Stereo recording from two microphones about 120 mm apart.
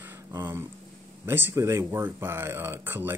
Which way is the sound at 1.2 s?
20° right (ahead or behind).